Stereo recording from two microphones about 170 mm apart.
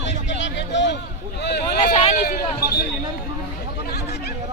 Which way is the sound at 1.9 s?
40° left (ahead or behind).